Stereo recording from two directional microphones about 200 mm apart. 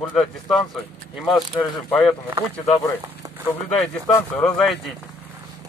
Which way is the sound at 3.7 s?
15° left (ahead or behind).